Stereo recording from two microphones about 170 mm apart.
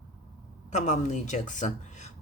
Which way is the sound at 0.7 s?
45° left (ahead or behind).